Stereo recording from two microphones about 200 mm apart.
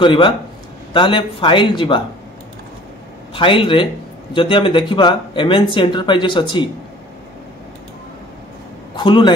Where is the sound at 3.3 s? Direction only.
25° left (ahead or behind).